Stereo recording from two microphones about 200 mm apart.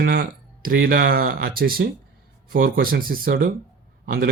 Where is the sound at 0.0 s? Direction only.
50° right (ahead or behind).